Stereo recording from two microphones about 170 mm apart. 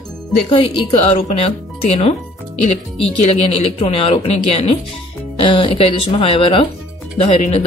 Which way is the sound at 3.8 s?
35° left (ahead or behind).